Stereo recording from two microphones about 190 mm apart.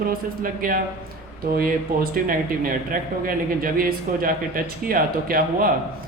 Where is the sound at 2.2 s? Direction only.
50° right (ahead or behind).